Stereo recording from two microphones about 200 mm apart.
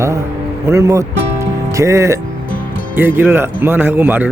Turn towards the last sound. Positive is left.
turn(degrees=-10)  # may be behind; listen again after turning